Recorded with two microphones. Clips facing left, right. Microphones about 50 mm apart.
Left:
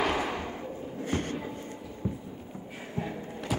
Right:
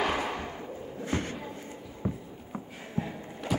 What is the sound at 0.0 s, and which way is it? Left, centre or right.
Thump, centre.